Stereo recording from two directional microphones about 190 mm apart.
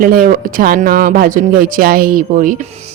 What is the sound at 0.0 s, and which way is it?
Speech, 50° right (ahead or behind).